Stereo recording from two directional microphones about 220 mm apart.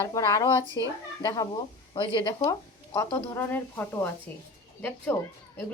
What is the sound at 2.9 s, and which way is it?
Speech, 10° left (ahead or behind).